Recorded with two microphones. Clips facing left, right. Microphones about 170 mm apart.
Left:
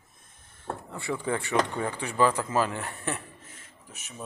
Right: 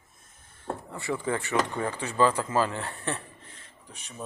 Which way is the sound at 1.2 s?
15° left (ahead or behind).